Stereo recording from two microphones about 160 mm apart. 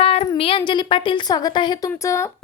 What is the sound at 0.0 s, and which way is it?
A woman's voice, 40° left (ahead or behind).